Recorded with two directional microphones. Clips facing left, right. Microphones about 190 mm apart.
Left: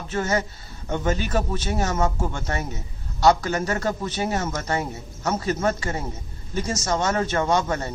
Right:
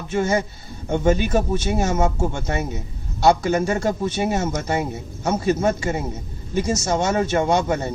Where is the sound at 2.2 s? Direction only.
25° right (ahead or behind).